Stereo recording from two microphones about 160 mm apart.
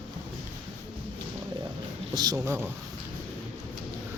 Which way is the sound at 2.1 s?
25° right (ahead or behind).